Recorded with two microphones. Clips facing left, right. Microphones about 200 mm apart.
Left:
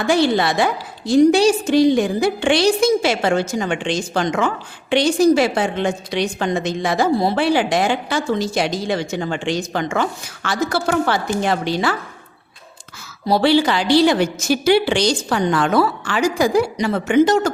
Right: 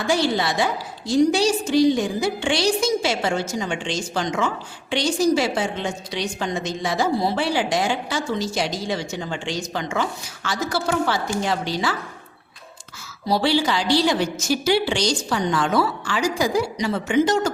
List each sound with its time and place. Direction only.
0.1 s a woman's voice: 60° left (ahead or behind)
13.2 s a woman's voice: 60° left (ahead or behind)